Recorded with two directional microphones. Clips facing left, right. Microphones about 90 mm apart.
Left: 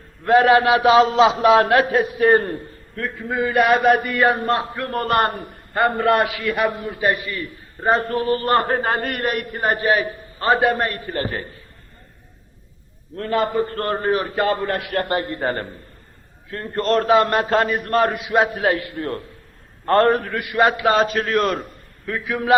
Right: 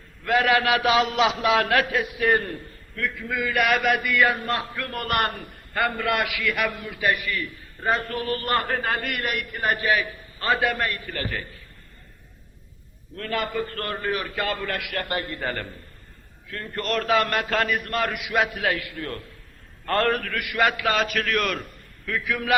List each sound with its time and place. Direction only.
0.3 s a man's voice: 30° left (ahead or behind)
13.1 s a man's voice: 30° left (ahead or behind)